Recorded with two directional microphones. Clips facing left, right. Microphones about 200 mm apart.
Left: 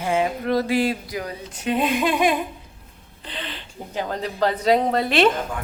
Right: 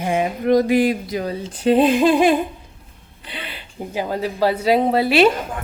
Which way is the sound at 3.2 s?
10° right (ahead or behind).